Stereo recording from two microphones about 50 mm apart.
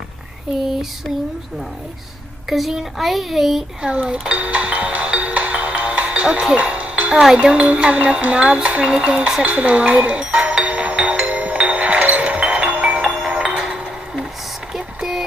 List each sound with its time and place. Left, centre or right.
2.5 s a child's voice: centre
3.8 s dishes: centre
4.3 s music: right
7.1 s speech: centre
9.4 s music: right
13.0 s music: centre
14.7 s a sound: centre